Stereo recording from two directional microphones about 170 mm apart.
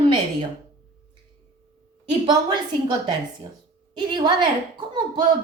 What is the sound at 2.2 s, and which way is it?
A woman's voice, 25° right (ahead or behind).